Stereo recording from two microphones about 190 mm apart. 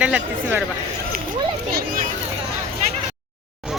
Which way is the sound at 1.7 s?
55° right (ahead or behind).